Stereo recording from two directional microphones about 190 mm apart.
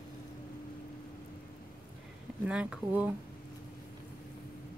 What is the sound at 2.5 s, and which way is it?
Speech, 5° right (ahead or behind).